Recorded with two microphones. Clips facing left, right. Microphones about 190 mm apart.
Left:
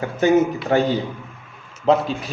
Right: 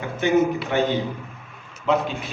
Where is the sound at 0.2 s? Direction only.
40° left (ahead or behind).